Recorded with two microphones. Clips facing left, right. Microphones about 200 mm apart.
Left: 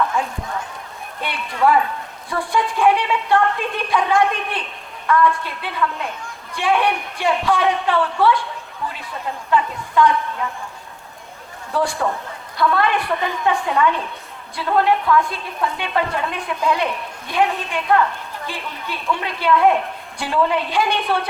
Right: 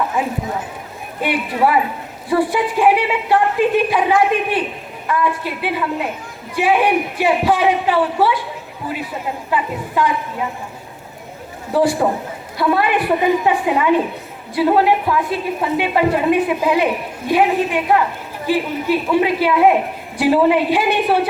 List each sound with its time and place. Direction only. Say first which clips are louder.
1.2 s a woman's voice: right 3 dB; 10° right (ahead or behind)
11.9 s a man's voice: right 5 dB; 20° right (ahead or behind)
12.5 s a woman's voice: right 2 dB; 10° right (ahead or behind)